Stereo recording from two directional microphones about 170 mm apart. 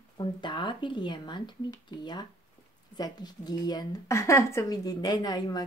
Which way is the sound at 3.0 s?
25° left (ahead or behind).